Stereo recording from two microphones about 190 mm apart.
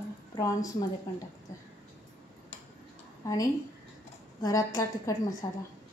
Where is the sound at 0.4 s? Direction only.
20° left (ahead or behind).